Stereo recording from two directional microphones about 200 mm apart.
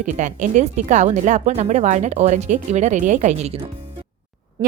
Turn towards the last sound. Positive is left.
turn(degrees=-35)  # may be behind; listen again after turning